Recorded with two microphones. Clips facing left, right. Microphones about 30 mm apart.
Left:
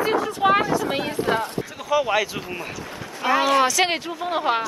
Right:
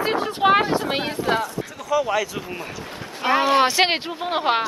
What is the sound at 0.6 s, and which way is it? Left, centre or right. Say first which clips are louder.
Speech: even; right.